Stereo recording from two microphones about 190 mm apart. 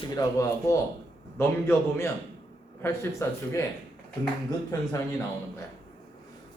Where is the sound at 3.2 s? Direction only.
15° left (ahead or behind).